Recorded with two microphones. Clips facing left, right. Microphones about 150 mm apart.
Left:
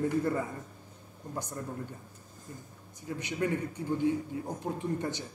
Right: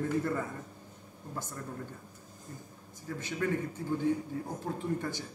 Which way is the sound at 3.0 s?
15° left (ahead or behind).